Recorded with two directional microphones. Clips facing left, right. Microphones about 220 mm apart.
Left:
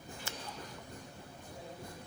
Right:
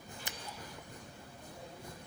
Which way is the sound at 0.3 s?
15° right (ahead or behind).